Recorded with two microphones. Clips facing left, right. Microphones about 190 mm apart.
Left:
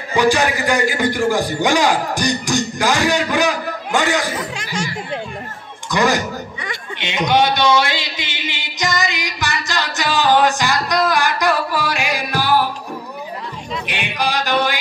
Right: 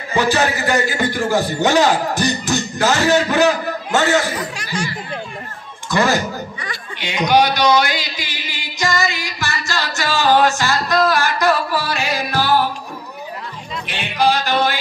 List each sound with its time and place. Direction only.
0.1 s a man's voice: 15° left (ahead or behind)
5.9 s chuckle: 15° left (ahead or behind)
13.8 s music: 15° left (ahead or behind)